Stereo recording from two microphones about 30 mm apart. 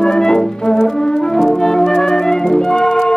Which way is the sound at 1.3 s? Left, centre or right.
Centre.